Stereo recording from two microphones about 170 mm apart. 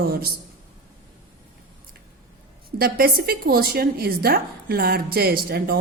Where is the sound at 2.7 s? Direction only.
60° right (ahead or behind).